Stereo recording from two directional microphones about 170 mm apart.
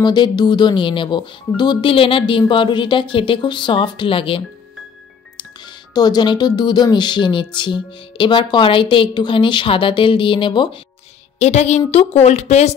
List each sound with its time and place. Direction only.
0.0 s a woman's voice: 25° left (ahead or behind)
5.9 s a woman's voice: 25° left (ahead or behind)
11.3 s a woman's voice: 40° left (ahead or behind)